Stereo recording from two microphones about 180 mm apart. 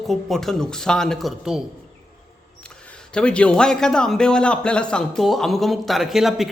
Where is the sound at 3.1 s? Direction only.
5° left (ahead or behind).